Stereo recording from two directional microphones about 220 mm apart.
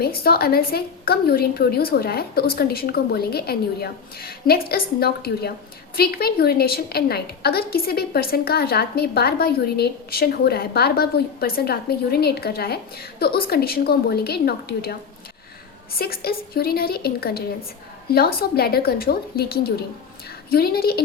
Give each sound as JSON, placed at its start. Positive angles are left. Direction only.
{"t": 0.0, "sound": "a woman's voice", "side_deg": 45}